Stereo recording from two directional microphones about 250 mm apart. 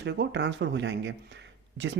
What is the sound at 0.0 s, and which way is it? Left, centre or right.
Speech, right.